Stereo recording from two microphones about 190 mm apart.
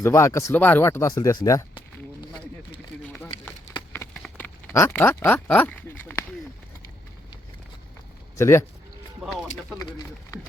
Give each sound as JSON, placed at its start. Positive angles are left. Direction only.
{"t": 0.0, "sound": "speech", "side_deg": 15}
{"t": 3.9, "sound": "typing", "side_deg": 10}
{"t": 8.4, "sound": "speech", "side_deg": 15}